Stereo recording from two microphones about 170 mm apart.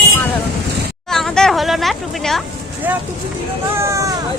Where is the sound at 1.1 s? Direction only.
Centre (ahead or behind).